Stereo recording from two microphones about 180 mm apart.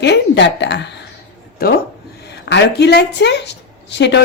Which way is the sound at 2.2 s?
70° left (ahead or behind).